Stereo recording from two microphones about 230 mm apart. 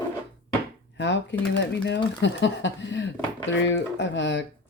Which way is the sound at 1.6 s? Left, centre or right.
Left.